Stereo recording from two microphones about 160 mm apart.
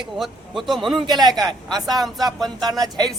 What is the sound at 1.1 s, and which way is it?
Speech, 25° right (ahead or behind).